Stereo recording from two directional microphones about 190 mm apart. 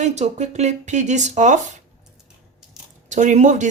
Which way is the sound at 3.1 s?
40° right (ahead or behind).